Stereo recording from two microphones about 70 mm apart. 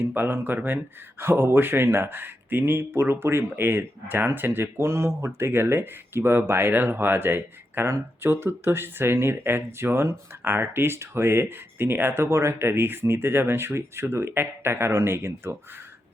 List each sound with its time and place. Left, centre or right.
0.0 s speech: right